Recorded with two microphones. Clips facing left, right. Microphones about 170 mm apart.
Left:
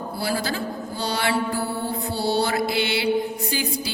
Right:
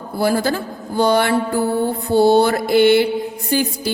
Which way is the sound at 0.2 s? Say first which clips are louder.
Right 9 dB; 50° right (ahead or behind).